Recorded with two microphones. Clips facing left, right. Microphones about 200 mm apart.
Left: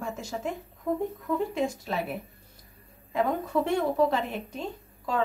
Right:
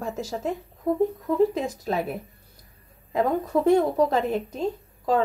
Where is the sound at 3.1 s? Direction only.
40° right (ahead or behind).